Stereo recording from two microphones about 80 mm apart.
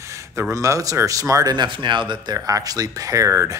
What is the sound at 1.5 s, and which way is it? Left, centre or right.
Speech, right.